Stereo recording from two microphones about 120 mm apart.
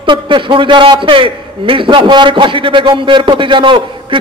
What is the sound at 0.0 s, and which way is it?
A man's voice, 45° right (ahead or behind).